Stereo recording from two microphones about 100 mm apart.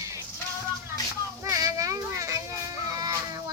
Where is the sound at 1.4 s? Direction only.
35° right (ahead or behind).